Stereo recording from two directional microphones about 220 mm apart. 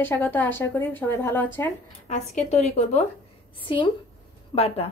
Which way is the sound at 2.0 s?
30° left (ahead or behind).